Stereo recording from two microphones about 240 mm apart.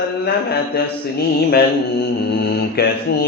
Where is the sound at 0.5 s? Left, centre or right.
Left.